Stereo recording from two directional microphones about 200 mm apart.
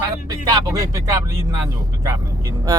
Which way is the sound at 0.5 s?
15° right (ahead or behind).